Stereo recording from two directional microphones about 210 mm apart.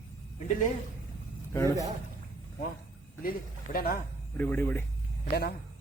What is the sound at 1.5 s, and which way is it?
Speech, 15° left (ahead or behind).